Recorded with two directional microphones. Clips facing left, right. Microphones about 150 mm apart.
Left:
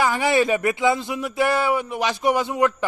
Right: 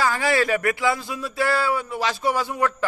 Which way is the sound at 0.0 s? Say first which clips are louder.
Left 2 dB; 20° left (ahead or behind).